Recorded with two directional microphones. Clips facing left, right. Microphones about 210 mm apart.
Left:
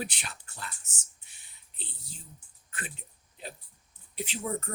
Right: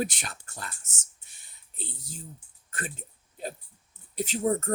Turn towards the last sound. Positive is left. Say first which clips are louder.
# right 7 dB
turn(degrees=-40)  # may be behind; listen again after turning